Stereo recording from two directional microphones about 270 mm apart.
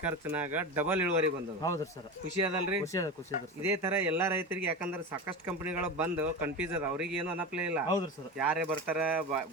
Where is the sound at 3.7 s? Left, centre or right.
Centre.